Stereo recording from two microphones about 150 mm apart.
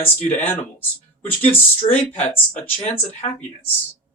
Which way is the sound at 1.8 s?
40° left (ahead or behind).